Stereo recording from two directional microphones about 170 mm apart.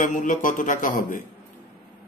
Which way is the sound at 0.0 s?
50° left (ahead or behind).